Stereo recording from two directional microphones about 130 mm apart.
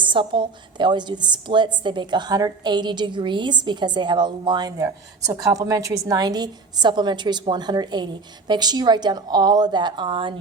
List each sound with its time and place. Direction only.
0.0 s a woman's voice: 40° right (ahead or behind)